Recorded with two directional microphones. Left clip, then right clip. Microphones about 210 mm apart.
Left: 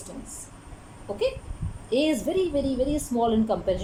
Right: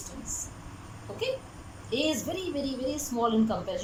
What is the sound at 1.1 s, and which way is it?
A woman's voice, 35° left (ahead or behind).